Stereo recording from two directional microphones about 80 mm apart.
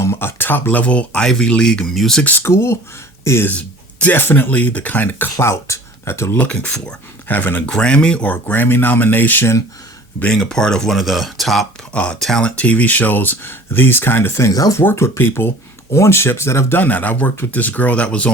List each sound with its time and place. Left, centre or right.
0.0 s speech: left; by 2.2 s centre
2.4 s speech: left
3.6 s speech: left
5.4 s speech: left
6.3 s speech: centre
7.7 s speech: centre
10.2 s speech: centre
10.9 s speech: centre; by 14.8 s left
14.8 s speech: left; by 18.3 s centre